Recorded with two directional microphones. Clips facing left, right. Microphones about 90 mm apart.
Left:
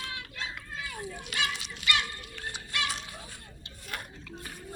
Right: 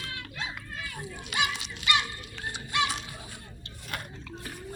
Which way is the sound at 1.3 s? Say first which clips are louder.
Right 4 dB; 20° right (ahead or behind).